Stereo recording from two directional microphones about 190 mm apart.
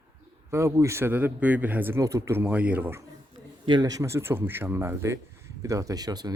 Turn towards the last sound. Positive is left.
turn(degrees=-20)  # may be behind; listen again after turning